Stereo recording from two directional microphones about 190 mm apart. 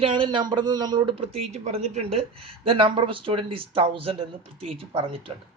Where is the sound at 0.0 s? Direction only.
25° right (ahead or behind).